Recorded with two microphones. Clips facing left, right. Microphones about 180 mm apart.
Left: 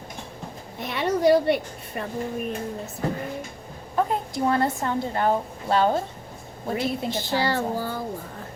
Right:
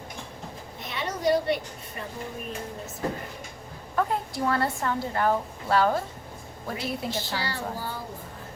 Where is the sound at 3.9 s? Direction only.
20° left (ahead or behind).